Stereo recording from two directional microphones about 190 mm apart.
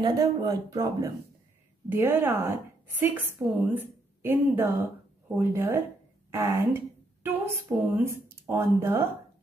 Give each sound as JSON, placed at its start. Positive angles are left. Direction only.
{"t": 0.0, "sound": "speech", "side_deg": -20}